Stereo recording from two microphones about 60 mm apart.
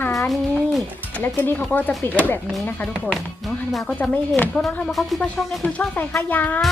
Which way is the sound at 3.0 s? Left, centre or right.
Centre.